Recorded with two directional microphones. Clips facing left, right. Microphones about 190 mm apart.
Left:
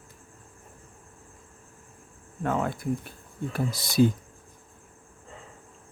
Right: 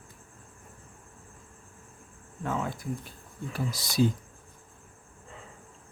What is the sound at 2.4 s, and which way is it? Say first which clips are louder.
Speech: left 4 dB; 60° left (ahead or behind).